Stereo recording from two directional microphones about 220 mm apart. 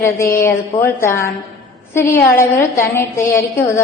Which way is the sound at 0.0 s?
10° left (ahead or behind).